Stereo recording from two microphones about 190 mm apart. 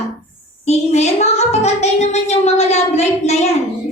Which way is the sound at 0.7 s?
35° left (ahead or behind).